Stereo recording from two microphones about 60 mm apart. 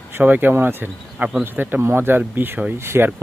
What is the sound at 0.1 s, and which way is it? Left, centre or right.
Speech, right.